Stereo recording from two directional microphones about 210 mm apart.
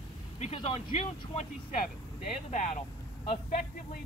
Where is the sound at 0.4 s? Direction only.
30° left (ahead or behind).